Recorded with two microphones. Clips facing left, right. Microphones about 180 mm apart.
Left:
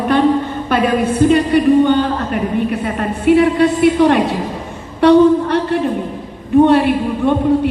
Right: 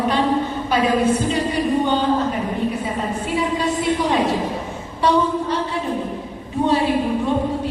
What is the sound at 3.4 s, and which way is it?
Speech, 65° left (ahead or behind).